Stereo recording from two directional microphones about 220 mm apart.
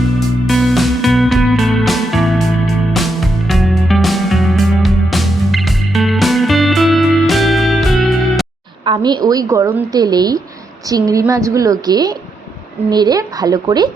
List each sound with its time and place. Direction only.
0.4 s music: centre (ahead or behind)
8.8 s a woman's voice: 20° right (ahead or behind)